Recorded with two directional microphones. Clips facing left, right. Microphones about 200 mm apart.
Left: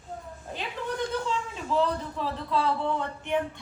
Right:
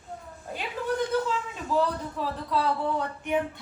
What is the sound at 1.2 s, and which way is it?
A man's voice, 5° right (ahead or behind).